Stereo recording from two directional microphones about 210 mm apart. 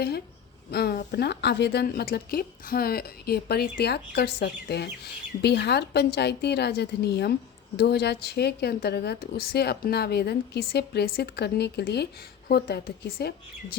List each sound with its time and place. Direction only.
0.7 s a woman's voice: 50° left (ahead or behind)